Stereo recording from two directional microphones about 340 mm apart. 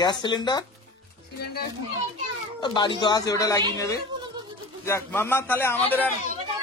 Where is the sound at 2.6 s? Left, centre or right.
Centre.